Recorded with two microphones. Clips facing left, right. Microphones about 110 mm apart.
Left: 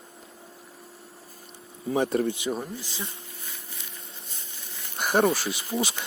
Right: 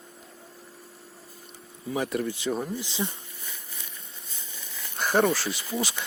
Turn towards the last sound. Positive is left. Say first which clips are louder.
# left 1 dB
turn(degrees=20)  # may be behind; listen again after turning